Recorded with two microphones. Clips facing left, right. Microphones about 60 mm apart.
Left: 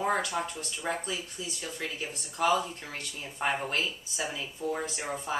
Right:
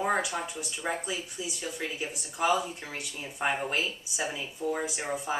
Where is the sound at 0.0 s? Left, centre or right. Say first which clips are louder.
Right 1 dB; centre.